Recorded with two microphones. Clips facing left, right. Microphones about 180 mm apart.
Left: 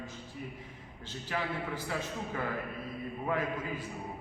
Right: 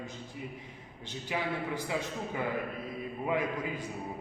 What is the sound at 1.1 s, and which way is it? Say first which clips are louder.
Speech: right 1 dB; 15° right (ahead or behind).